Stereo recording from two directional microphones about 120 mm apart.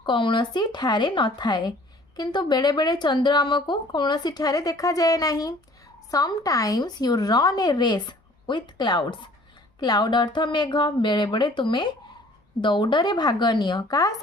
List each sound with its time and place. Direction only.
0.0 s speech: 45° left (ahead or behind)